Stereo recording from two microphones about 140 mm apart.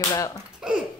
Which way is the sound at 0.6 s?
5° right (ahead or behind).